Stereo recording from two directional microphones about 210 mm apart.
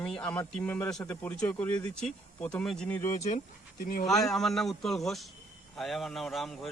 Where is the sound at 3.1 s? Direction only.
30° left (ahead or behind).